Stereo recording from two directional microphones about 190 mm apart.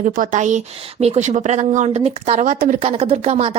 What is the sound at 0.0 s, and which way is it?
Speech, 45° right (ahead or behind).